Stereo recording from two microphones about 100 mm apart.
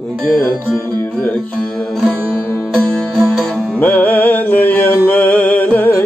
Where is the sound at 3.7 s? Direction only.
15° left (ahead or behind).